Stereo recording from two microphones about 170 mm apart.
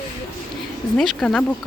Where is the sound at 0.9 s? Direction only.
5° left (ahead or behind).